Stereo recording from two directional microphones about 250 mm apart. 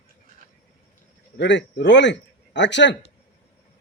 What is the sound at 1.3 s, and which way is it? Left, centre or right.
Speech, left.